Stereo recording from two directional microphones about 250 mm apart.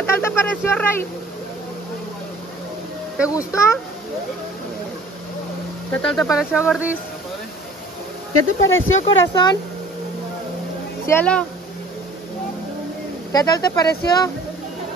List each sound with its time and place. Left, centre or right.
0.0 s a sound: centre
3.3 s speech: centre
6.0 s speech: centre
8.6 s speech: left
9.2 s speech: centre
11.1 s speech: centre
13.3 s speech: centre